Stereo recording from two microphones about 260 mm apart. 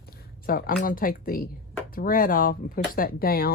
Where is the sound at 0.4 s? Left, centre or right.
Left.